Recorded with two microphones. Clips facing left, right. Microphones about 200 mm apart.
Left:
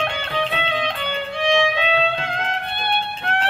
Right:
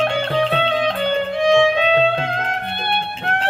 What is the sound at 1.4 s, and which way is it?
Music, 40° right (ahead or behind).